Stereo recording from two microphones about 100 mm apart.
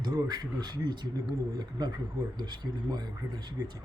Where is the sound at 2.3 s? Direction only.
45° right (ahead or behind).